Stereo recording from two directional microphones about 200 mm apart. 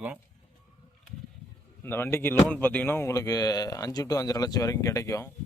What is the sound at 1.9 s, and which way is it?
Speech, 10° left (ahead or behind).